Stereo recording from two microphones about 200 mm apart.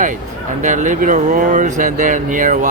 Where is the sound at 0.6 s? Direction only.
40° right (ahead or behind).